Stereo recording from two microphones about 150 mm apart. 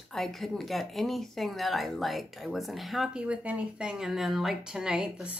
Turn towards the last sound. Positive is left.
turn(degrees=-5)  # may be behind; listen again after turning